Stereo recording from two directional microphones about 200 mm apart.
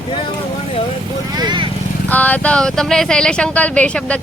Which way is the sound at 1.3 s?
25° right (ahead or behind).